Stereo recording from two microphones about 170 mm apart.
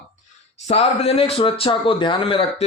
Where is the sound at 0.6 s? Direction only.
35° left (ahead or behind).